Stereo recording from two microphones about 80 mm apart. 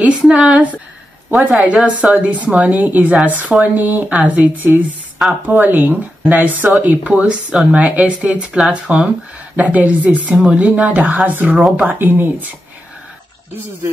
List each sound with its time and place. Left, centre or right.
0.0 s speech: centre